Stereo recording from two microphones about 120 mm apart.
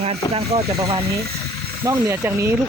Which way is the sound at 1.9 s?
20° right (ahead or behind).